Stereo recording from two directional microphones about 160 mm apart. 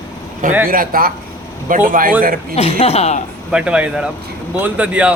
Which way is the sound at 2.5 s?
40° left (ahead or behind).